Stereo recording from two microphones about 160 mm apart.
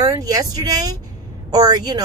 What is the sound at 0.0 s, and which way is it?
Speech, 20° right (ahead or behind).